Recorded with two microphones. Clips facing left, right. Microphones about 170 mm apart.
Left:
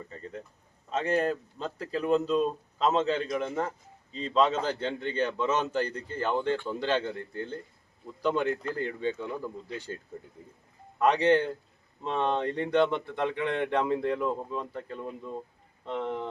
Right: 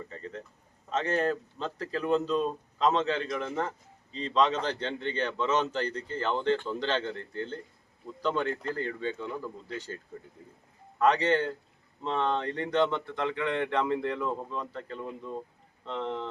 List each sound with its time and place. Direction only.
0.9 s a man's voice: 10° left (ahead or behind)
11.0 s a man's voice: 10° left (ahead or behind)